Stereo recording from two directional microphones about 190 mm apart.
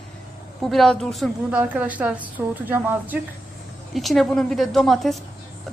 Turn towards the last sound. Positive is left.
turn(degrees=0)  # may be behind; listen again after turning